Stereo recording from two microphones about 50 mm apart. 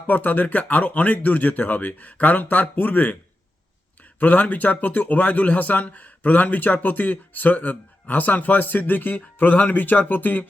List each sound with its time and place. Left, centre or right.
0.1 s speech: left
4.2 s speech: left